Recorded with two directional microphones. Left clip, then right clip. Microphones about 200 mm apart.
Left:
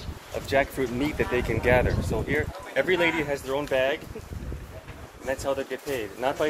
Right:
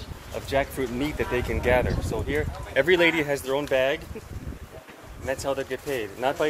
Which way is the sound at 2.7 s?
60° right (ahead or behind).